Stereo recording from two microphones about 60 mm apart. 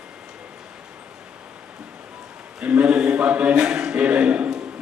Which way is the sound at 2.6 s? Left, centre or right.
Centre.